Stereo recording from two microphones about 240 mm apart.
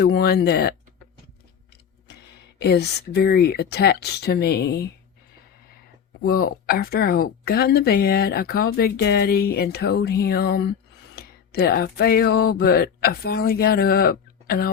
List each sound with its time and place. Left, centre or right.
0.0 s speech: left
2.6 s speech: left
6.2 s speech: left